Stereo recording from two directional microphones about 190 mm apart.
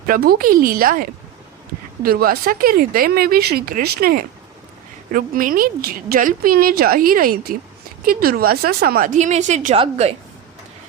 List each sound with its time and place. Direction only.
0.1 s a woman's voice: 50° right (ahead or behind)
2.0 s a woman's voice: 50° right (ahead or behind); by 10.2 s 30° right (ahead or behind)